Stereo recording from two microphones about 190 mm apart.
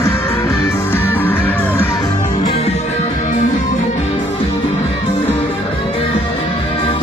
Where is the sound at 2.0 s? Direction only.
25° left (ahead or behind).